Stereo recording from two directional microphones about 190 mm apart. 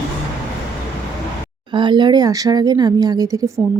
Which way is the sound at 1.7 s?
25° right (ahead or behind).